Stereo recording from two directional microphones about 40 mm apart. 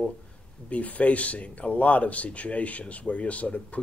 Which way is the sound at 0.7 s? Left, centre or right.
Left.